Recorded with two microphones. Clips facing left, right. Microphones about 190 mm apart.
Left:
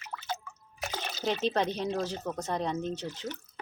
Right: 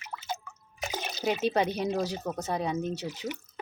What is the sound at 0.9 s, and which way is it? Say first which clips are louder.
Speech: right 2 dB; 10° right (ahead or behind).